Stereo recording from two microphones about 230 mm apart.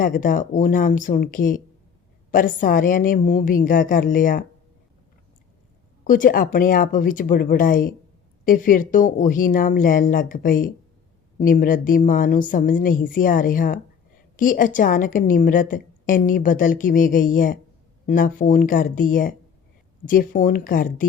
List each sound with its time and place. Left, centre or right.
0.0 s a woman's voice: left
6.1 s a woman's voice: left